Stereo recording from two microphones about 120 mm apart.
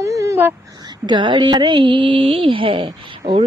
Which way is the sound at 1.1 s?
40° right (ahead or behind).